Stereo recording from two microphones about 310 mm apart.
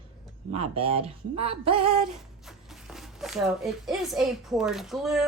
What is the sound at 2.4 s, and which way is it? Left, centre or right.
Speech, centre.